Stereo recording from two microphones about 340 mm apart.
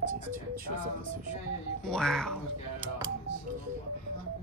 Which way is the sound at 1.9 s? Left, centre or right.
Centre.